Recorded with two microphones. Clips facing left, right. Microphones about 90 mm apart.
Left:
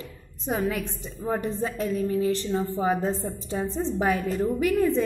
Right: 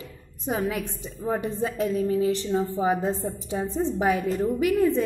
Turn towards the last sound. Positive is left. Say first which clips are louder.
# right 1 dB
turn(degrees=-10)  # may be behind; listen again after turning